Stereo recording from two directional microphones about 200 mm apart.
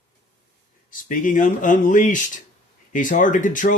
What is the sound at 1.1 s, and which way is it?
Speech, 40° left (ahead or behind).